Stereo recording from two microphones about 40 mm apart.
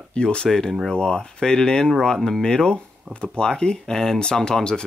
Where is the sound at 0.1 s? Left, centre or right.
Left.